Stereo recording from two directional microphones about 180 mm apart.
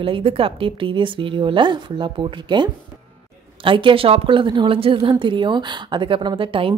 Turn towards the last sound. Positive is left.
turn(degrees=-30)  # may be behind; listen again after turning